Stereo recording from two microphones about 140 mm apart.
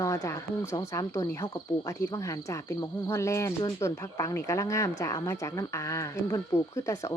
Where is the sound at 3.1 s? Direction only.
20° left (ahead or behind).